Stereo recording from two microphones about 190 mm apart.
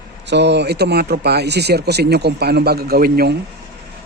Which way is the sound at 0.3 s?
65° right (ahead or behind).